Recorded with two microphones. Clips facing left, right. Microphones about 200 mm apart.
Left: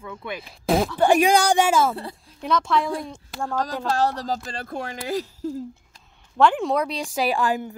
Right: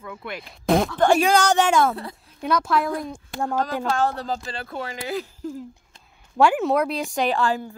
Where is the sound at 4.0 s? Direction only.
40° left (ahead or behind).